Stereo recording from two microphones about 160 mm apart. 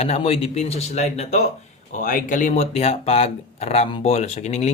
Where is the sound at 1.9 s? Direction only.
55° left (ahead or behind).